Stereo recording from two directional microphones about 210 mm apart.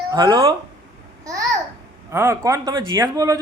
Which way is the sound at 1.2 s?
15° right (ahead or behind).